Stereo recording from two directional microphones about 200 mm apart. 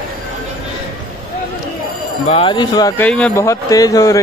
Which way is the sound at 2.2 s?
25° left (ahead or behind).